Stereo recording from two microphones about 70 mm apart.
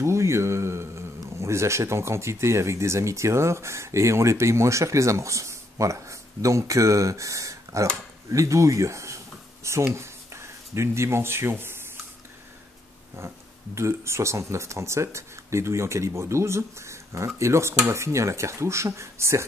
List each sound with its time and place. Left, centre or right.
0.0 s speech: right
8.3 s a sound: right
9.9 s speech: right
13.1 s speech: right